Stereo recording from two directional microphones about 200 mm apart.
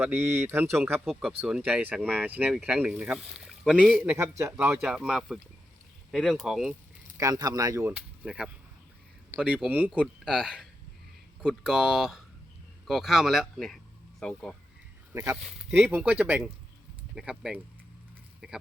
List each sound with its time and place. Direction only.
0.0 s speech: 10° right (ahead or behind)
1.0 s speech: centre (ahead or behind)
7.2 s speech: 20° right (ahead or behind)